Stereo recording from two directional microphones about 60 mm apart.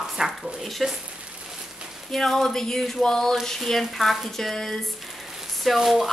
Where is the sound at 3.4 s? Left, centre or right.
Centre.